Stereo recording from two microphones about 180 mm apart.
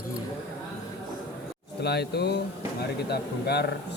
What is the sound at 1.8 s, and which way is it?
Speech, 65° left (ahead or behind).